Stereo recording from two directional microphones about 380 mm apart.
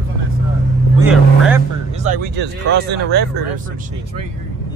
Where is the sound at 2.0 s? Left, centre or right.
Right.